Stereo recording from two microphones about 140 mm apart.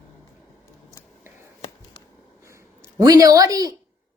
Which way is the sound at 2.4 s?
20° right (ahead or behind).